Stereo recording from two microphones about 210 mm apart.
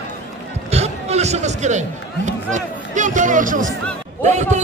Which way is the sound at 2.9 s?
35° right (ahead or behind).